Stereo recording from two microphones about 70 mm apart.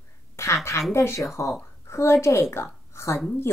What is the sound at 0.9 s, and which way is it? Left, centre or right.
A child's voice, left.